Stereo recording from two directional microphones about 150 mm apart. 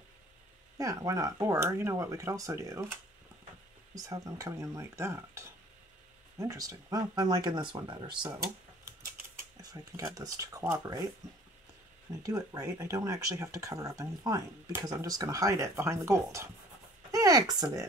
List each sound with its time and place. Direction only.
0.7 s speech: 20° right (ahead or behind)
9.4 s speech: 25° right (ahead or behind)
12.1 s speech: 25° right (ahead or behind)